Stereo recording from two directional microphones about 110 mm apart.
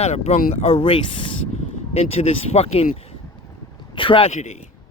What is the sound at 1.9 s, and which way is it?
Speech, 65° left (ahead or behind).